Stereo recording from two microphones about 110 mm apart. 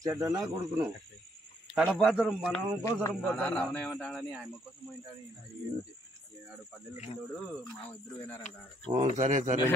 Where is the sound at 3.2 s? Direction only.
10° left (ahead or behind).